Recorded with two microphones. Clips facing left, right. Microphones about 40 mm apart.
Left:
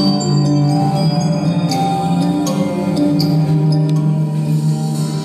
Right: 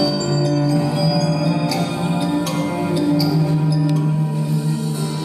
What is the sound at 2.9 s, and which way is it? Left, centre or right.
Music, right.